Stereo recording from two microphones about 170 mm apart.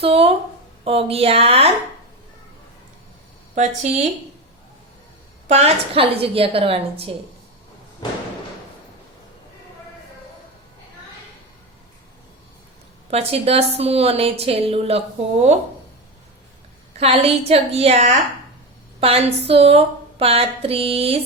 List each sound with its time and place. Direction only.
0.0 s a woman's voice: 35° right (ahead or behind)
5.5 s a woman's voice: 40° right (ahead or behind)
13.1 s a woman's voice: 35° right (ahead or behind)
17.0 s a woman's voice: 35° right (ahead or behind)